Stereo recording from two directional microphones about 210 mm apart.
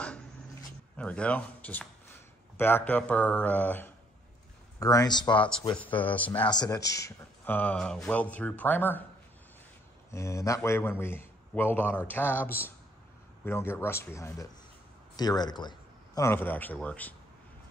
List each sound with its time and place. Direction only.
0.9 s speech: 5° left (ahead or behind)
10.1 s speech: 15° left (ahead or behind)